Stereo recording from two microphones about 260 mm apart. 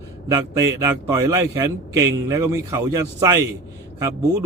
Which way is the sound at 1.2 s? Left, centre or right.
Centre.